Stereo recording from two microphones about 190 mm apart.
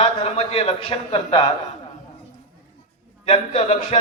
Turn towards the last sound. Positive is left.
turn(degrees=45)  # may be behind; listen again after turning